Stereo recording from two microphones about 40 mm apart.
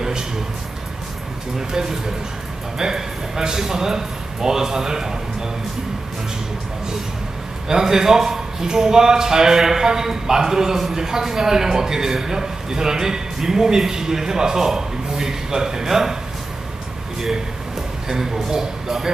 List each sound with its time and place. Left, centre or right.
1.7 s a man's voice: centre
7.6 s a man's voice: centre
18.0 s a man's voice: centre